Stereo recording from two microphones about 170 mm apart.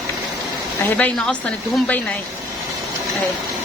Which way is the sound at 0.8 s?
10° left (ahead or behind).